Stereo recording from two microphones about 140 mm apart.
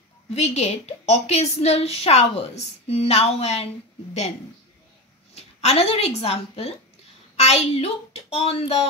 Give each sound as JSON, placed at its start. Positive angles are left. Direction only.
{"t": 0.3, "sound": "a woman's voice", "side_deg": 50}
{"t": 5.3, "sound": "a woman's voice", "side_deg": 50}